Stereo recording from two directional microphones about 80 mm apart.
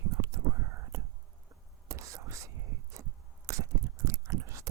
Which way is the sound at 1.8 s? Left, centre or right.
Right.